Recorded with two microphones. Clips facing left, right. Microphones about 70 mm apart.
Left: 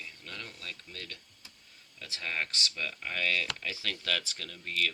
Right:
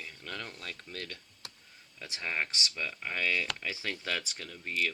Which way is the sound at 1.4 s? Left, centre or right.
Right.